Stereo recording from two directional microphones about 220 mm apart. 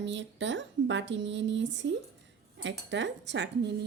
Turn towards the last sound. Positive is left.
turn(degrees=-50)  # may be behind; listen again after turning